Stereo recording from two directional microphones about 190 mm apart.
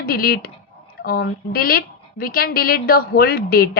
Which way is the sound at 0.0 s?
50° left (ahead or behind).